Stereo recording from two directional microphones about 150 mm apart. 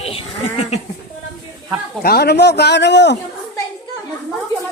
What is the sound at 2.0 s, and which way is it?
Speech, 90° left.